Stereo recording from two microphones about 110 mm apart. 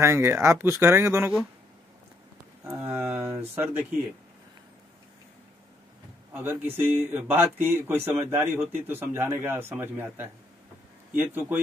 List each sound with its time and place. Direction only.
0.0 s a man's voice: 25° right (ahead or behind)
2.6 s a sound: 25° right (ahead or behind)
6.3 s a man's voice: 20° right (ahead or behind)